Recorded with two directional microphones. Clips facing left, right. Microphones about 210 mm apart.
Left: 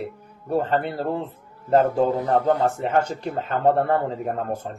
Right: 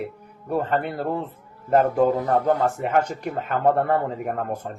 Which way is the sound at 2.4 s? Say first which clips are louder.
Left 1 dB; 30° left (ahead or behind).